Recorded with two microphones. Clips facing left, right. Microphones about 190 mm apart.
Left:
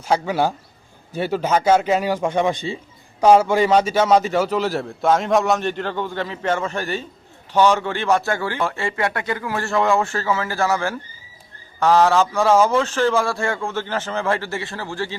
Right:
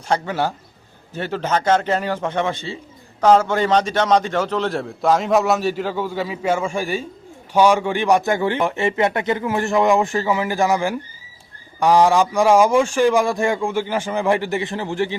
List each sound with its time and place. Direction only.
0.1 s a man's voice: 10° left (ahead or behind); by 15.1 s 20° right (ahead or behind)